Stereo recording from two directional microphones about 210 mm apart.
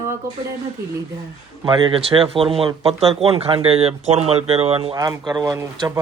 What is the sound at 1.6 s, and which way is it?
Speech, 20° right (ahead or behind).